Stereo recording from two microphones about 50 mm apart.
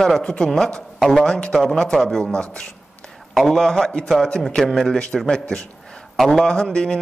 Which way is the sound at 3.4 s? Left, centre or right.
Centre.